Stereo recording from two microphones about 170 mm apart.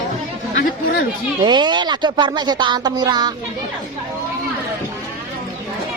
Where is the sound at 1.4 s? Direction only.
25° right (ahead or behind).